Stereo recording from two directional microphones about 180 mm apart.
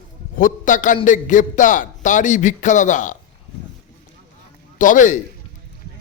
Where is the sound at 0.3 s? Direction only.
45° left (ahead or behind).